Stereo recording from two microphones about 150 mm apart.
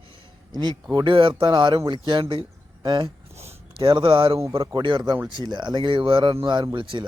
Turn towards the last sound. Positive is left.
turn(degrees=-35)  # may be behind; listen again after turning